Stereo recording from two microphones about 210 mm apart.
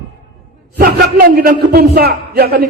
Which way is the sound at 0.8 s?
40° right (ahead or behind).